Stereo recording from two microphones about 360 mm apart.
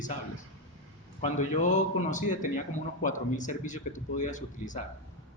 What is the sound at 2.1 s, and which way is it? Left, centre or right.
Speech, left.